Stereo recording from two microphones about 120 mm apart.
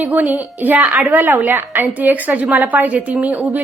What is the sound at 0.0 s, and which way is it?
A woman's voice, 10° right (ahead or behind).